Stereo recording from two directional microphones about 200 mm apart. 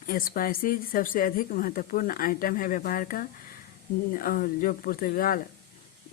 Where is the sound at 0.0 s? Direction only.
45° left (ahead or behind).